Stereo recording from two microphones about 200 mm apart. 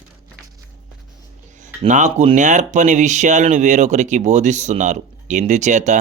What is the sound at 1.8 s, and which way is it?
Speech, 35° right (ahead or behind).